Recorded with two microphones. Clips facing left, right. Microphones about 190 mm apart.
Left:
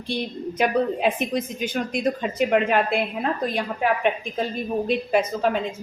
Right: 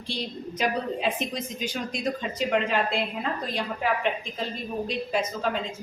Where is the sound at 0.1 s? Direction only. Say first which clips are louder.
Left 6 dB; 55° left (ahead or behind).